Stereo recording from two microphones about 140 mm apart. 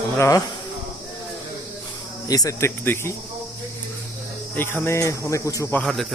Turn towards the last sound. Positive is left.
turn(degrees=5)  # may be behind; listen again after turning